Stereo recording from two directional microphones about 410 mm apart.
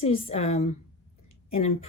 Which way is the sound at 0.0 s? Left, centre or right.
Centre.